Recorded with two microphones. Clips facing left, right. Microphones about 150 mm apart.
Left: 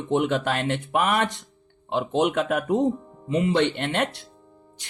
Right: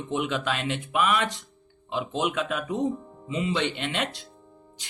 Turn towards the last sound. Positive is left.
turn(degrees=55)  # may be behind; listen again after turning